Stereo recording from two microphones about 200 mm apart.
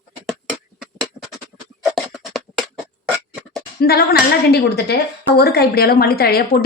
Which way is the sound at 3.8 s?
50° left (ahead or behind).